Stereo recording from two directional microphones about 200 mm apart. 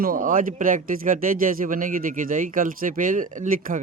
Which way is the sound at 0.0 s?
40° right (ahead or behind).